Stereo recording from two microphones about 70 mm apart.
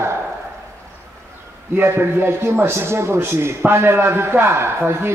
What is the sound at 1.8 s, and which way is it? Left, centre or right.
A man's voice, right.